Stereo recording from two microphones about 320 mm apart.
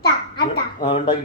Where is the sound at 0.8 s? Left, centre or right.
Centre.